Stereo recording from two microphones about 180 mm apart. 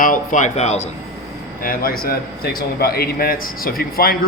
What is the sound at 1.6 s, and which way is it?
A man's voice, 55° left (ahead or behind).